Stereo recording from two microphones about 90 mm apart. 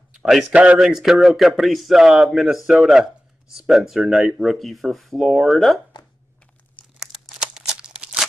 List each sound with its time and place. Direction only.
0.2 s a sound: centre (ahead or behind)
0.5 s speech: 15° right (ahead or behind)
0.7 s speech: 5° right (ahead or behind)
7.0 s crumpling: 5° right (ahead or behind)